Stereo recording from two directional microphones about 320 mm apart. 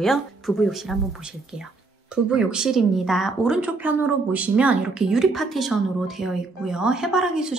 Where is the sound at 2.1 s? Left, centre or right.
Centre.